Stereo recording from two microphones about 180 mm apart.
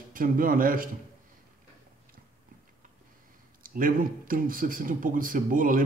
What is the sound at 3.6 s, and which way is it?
Speech, 50° right (ahead or behind).